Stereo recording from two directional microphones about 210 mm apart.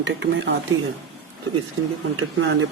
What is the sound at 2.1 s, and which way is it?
Speech, 70° right (ahead or behind).